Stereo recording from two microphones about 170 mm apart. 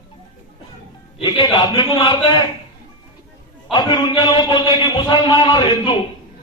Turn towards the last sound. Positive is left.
turn(degrees=25)  # may be behind; listen again after turning